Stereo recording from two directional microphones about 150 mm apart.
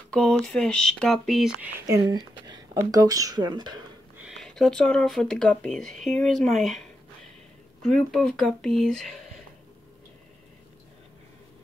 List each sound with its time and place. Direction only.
0.1 s speech: 5° left (ahead or behind)
1.9 s speech: 25° right (ahead or behind)
4.2 s speech: centre (ahead or behind)
7.8 s speech: 5° left (ahead or behind)